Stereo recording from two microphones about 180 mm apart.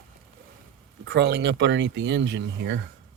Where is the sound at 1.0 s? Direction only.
65° right (ahead or behind); by 2.8 s 90° right.